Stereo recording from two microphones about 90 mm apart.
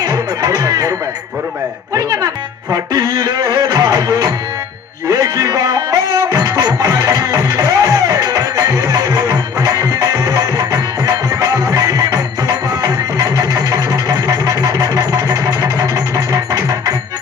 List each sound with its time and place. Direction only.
0.0 s music: 45° right (ahead or behind)